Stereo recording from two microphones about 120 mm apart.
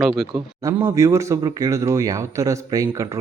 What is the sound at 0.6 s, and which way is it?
Speech, 20° right (ahead or behind).